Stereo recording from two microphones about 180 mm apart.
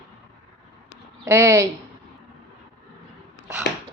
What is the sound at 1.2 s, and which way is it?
Speech, 15° right (ahead or behind).